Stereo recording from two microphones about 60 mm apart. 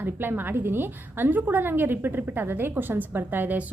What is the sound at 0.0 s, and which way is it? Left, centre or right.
A woman's voice, right.